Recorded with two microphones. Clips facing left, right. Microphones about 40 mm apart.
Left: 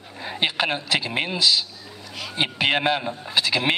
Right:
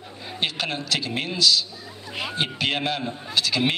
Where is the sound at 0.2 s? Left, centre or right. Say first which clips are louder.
Left 4 dB; left.